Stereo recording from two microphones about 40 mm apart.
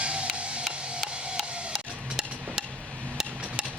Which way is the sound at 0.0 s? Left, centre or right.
Right.